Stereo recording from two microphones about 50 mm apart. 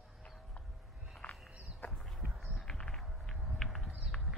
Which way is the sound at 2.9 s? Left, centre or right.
Centre.